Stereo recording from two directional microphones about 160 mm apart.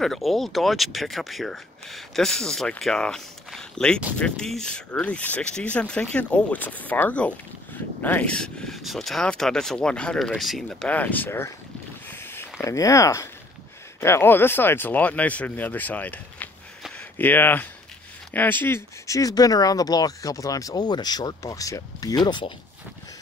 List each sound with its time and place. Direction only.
0.0 s speech: centre (ahead or behind)
12.1 s a sound: 15° left (ahead or behind)
14.0 s speech: 15° left (ahead or behind)